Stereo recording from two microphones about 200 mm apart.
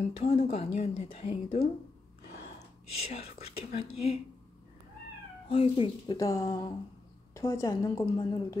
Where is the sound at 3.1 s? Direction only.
30° left (ahead or behind).